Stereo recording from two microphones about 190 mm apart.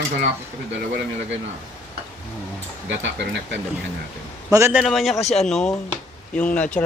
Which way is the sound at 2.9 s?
70° right (ahead or behind).